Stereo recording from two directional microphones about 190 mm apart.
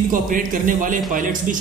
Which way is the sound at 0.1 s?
45° right (ahead or behind).